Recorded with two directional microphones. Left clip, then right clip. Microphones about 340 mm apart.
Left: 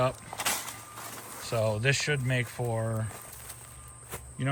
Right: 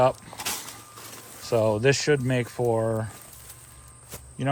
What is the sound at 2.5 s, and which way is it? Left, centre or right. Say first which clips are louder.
Speech: right 9 dB; right.